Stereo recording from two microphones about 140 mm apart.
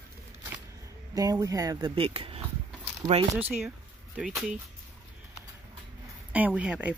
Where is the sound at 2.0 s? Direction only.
40° right (ahead or behind).